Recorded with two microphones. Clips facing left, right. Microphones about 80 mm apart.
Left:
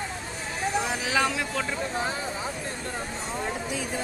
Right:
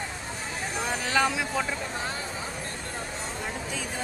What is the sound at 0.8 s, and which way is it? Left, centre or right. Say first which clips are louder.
Speech: even; centre.